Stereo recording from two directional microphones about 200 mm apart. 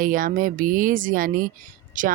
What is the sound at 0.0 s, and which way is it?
Speech, 45° right (ahead or behind).